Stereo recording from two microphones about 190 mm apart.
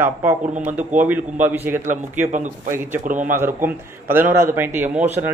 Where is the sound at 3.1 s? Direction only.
45° right (ahead or behind).